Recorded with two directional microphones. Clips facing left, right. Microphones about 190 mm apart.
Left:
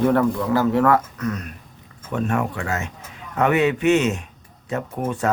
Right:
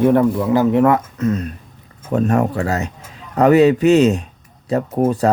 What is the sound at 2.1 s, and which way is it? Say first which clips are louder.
Speech: right 7 dB; 40° right (ahead or behind).